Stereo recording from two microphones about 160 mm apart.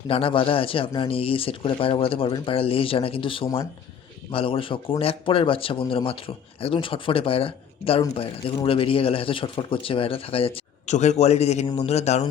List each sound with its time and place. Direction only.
0.1 s speech: 35° left (ahead or behind)